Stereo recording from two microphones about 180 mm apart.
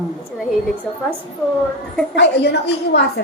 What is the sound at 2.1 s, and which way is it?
A woman's voice, 70° left (ahead or behind).